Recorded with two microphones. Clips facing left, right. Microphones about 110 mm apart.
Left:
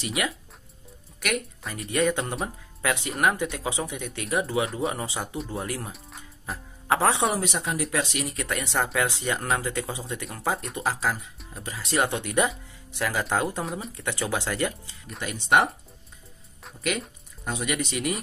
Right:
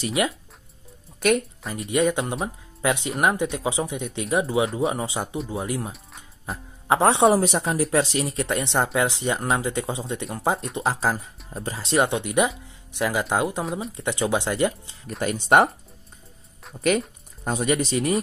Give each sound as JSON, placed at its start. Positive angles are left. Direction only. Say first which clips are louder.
{"t": 0.0, "sound": "speech", "louder": "right 5 dB", "side_deg": -30}
{"t": 1.7, "sound": "speech", "louder": "right 3 dB", "side_deg": -25}
{"t": 5.9, "sound": "speech", "louder": "right 3 dB", "side_deg": 0}
{"t": 6.9, "sound": "speech", "louder": "right 6 dB", "side_deg": -25}
{"t": 13.7, "sound": "speech", "louder": "right 4 dB", "side_deg": 0}
{"t": 13.9, "sound": "speech", "louder": "right 6 dB", "side_deg": -20}
{"t": 15.0, "sound": "speech", "louder": "right 4 dB", "side_deg": -45}
{"t": 17.5, "sound": "speech", "louder": "right 6 dB", "side_deg": -40}